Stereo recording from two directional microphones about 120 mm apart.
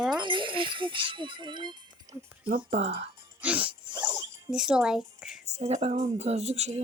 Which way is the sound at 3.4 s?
10° right (ahead or behind).